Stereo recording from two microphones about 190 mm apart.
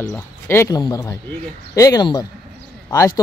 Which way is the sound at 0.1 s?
15° left (ahead or behind).